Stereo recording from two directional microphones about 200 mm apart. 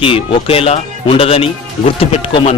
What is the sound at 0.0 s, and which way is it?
Speech, 30° left (ahead or behind).